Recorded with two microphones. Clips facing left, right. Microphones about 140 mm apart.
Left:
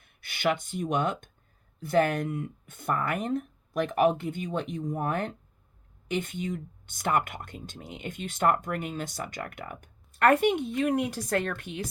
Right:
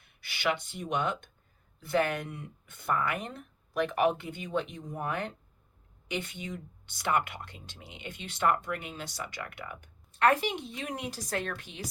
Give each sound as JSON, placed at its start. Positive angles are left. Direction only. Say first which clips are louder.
{"t": 0.0, "sound": "speech", "louder": "left 4 dB", "side_deg": 50}